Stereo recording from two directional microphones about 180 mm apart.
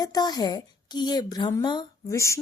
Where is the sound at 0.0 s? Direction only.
20° left (ahead or behind).